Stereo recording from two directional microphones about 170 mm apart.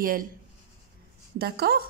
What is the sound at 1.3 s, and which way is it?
Speech, 65° right (ahead or behind).